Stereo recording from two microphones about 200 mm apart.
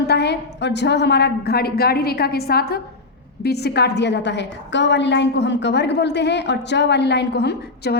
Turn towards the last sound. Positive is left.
turn(degrees=55)  # may be behind; listen again after turning